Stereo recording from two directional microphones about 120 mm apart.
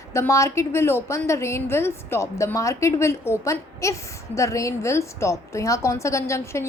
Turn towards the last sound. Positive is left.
turn(degrees=25)  # may be behind; listen again after turning